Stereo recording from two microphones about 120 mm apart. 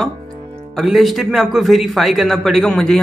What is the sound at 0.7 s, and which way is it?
A man's voice, centre (ahead or behind).